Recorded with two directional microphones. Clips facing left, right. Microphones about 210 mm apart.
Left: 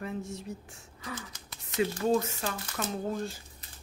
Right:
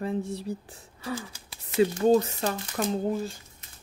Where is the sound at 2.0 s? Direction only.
40° right (ahead or behind).